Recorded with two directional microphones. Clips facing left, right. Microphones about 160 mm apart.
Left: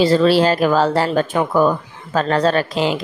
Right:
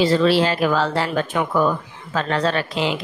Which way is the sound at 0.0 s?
40° left (ahead or behind).